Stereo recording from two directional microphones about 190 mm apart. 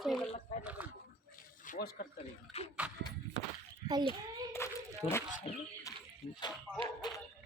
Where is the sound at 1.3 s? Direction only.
45° left (ahead or behind).